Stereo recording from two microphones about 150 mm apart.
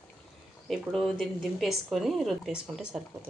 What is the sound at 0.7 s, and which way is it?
Speech, centre (ahead or behind).